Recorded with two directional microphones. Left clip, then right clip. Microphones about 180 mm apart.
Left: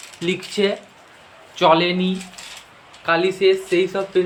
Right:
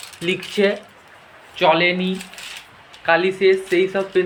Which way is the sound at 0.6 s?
15° left (ahead or behind).